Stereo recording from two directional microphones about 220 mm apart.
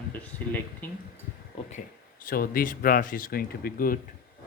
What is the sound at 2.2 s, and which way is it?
Speech, 40° left (ahead or behind).